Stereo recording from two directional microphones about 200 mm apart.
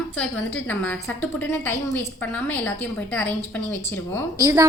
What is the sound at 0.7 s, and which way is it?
A woman's voice, 10° left (ahead or behind).